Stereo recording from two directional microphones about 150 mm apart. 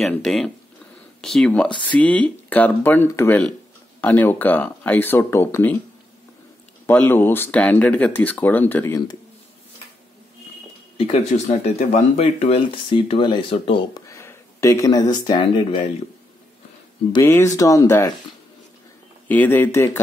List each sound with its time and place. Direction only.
0.0 s speech: centre (ahead or behind)
6.9 s speech: 10° left (ahead or behind)
11.1 s speech: 45° left (ahead or behind)
14.0 s a sound: 20° left (ahead or behind)
15.2 s speech: 30° left (ahead or behind)
17.2 s speech: 15° left (ahead or behind)
19.2 s speech: 15° left (ahead or behind)